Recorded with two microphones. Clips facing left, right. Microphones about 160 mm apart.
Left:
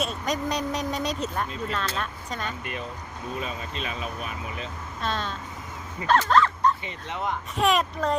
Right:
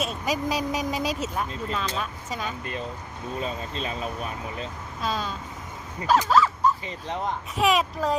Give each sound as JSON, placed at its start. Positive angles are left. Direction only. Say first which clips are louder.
{"t": 0.0, "sound": "speech", "louder": "right 1 dB", "side_deg": -5}
{"t": 3.4, "sound": "speech", "louder": "right 2 dB", "side_deg": -30}
{"t": 4.9, "sound": "speech", "louder": "right 1 dB", "side_deg": -5}